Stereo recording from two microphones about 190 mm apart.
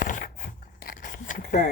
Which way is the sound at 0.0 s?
45° left (ahead or behind).